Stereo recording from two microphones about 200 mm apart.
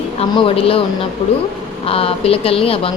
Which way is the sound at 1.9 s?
30° left (ahead or behind).